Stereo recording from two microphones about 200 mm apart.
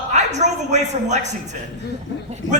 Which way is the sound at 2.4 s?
70° left (ahead or behind).